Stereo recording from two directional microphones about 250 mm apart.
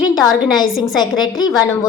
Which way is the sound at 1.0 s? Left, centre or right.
Centre.